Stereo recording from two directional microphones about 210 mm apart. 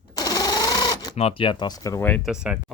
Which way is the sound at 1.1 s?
25° left (ahead or behind).